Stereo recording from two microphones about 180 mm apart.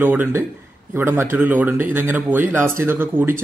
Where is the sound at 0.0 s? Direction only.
10° right (ahead or behind).